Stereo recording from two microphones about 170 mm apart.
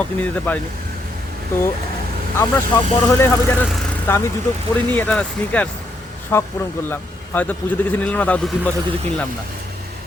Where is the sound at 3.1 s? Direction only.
15° left (ahead or behind).